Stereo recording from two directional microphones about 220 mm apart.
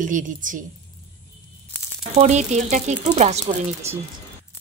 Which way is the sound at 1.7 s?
10° left (ahead or behind).